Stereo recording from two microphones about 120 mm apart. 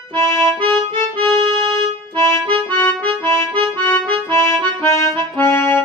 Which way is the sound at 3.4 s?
45° right (ahead or behind).